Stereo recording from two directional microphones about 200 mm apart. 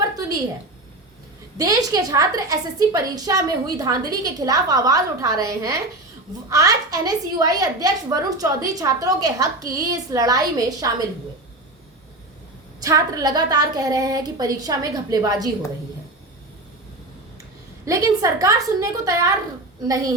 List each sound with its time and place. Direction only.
1.5 s a woman's voice: 20° right (ahead or behind)
12.8 s a woman's voice: 20° right (ahead or behind)
17.8 s a woman's voice: 15° right (ahead or behind)